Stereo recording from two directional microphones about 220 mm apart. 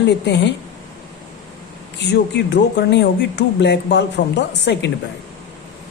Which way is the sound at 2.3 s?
55° left (ahead or behind).